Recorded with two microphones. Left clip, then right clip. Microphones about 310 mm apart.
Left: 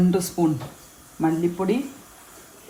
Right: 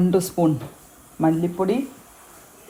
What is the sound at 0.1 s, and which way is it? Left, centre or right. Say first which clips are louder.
Speech: right 3 dB; centre.